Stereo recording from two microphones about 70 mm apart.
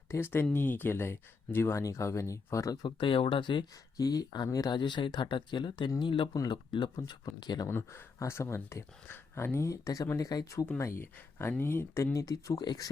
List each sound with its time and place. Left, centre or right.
0.1 s speech: left
1.8 s speech: left
3.6 s speech: left
4.5 s speech: left
5.9 s speech: left
6.5 s speech: left
7.7 s speech: left
9.6 s speech: left
10.8 s speech: left
12.1 s speech: left